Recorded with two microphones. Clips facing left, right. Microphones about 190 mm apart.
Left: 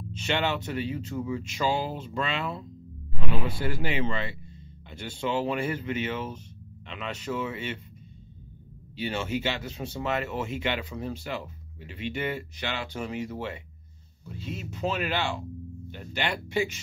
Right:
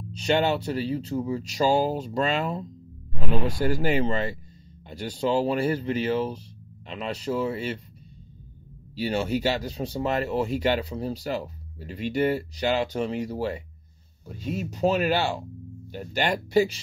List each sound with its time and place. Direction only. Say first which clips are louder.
0.1 s speech: right 5 dB; 35° right (ahead or behind)
8.9 s speech: right 4 dB; 35° right (ahead or behind)